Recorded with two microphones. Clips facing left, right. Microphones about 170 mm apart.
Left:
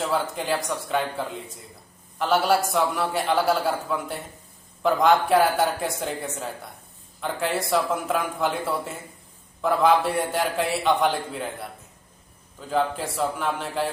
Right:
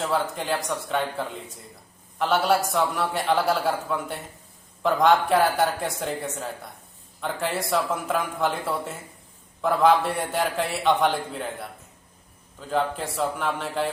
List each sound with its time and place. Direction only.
0.0 s a man's voice: centre (ahead or behind)